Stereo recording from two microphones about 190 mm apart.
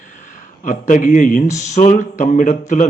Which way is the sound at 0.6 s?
45° left (ahead or behind).